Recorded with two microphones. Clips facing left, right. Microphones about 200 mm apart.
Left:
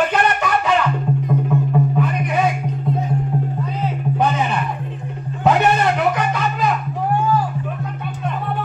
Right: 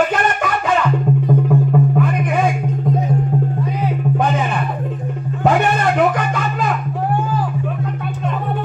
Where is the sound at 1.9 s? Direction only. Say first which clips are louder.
Right 3 dB; 50° right (ahead or behind).